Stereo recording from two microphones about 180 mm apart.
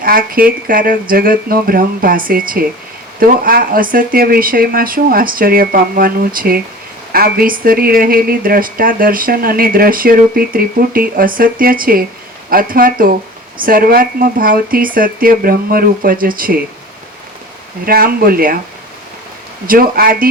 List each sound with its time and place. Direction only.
0.0 s speech: 55° right (ahead or behind)
17.8 s speech: 55° right (ahead or behind)
19.6 s speech: 55° right (ahead or behind)